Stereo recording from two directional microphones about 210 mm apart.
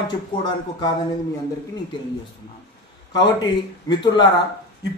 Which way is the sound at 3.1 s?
20° left (ahead or behind).